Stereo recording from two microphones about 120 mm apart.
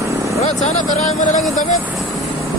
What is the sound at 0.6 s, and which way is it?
Speech, 80° left.